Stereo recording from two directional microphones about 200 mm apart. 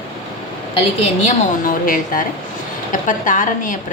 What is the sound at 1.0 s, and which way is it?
A woman's voice, 40° left (ahead or behind).